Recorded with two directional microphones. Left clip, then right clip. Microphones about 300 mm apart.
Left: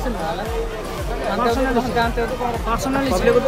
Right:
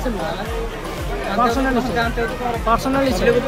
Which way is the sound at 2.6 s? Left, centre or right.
Centre.